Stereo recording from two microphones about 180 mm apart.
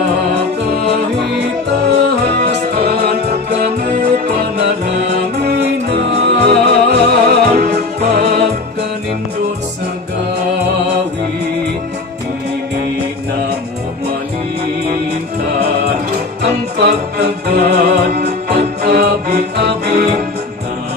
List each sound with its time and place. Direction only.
2.0 s music: 60° right (ahead or behind)
16.4 s music: 65° right (ahead or behind)